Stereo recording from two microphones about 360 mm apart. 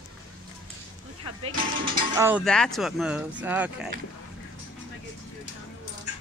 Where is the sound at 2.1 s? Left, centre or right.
Centre.